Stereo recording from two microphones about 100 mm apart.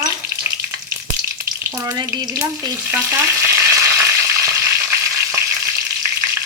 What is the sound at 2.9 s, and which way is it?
Frying, 25° right (ahead or behind).